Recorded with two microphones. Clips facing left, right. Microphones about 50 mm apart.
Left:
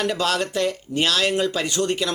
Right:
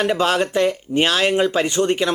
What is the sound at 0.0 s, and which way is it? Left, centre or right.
Speech, right.